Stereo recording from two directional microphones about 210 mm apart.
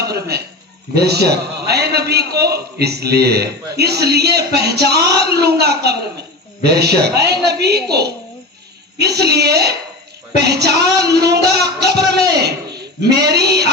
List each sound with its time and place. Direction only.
0.0 s a man's voice: 50° right (ahead or behind)